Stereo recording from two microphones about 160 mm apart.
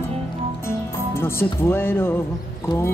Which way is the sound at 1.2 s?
15° left (ahead or behind).